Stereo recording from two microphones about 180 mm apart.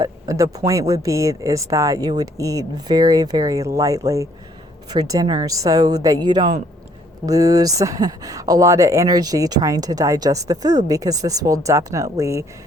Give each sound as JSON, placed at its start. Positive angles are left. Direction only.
{"t": 0.0, "sound": "speech", "side_deg": -20}